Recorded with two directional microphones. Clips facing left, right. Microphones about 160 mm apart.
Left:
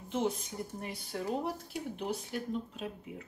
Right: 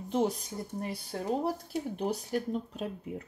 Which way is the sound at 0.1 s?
35° right (ahead or behind).